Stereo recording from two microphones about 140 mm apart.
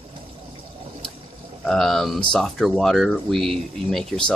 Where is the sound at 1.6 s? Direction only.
5° left (ahead or behind).